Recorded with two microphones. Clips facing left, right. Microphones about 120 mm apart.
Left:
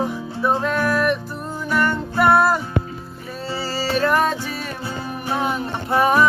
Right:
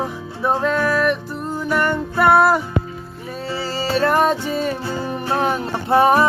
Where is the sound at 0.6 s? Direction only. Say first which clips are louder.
Right 2 dB; 5° left (ahead or behind).